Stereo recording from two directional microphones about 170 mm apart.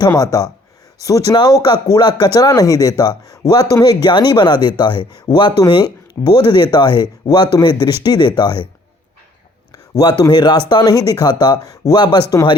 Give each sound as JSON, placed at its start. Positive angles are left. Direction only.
{"t": 0.0, "sound": "speech", "side_deg": 20}
{"t": 9.7, "sound": "speech", "side_deg": 20}